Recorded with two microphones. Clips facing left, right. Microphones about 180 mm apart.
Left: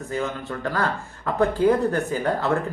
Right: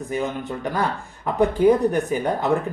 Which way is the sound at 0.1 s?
15° right (ahead or behind).